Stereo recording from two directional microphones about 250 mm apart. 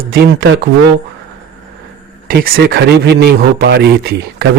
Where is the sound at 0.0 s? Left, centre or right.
Right.